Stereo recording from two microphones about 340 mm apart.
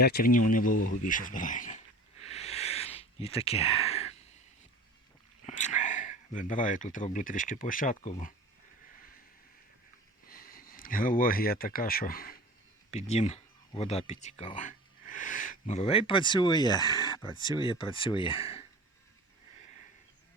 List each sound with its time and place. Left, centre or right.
0.0 s speech: left
0.9 s a sound: left
5.5 s speech: left
10.2 s speech: left